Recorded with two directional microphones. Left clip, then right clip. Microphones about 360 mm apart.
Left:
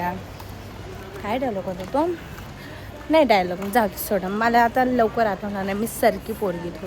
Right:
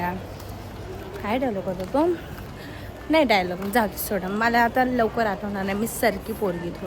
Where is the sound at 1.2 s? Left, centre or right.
Centre.